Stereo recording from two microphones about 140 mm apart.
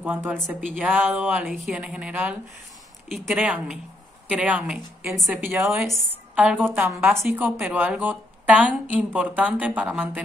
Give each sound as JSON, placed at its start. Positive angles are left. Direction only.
{"t": 0.0, "sound": "speech", "side_deg": -15}
{"t": 5.8, "sound": "a woman's voice", "side_deg": 0}